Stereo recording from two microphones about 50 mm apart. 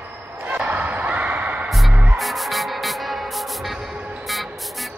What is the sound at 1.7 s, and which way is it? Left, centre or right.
Music, centre.